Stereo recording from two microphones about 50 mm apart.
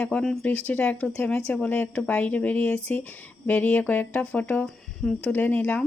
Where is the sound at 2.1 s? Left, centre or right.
Left.